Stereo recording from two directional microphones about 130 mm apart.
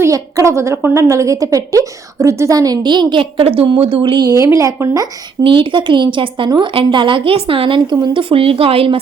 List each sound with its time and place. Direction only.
0.0 s a woman's voice: 25° right (ahead or behind)
5.4 s a woman's voice: 40° right (ahead or behind)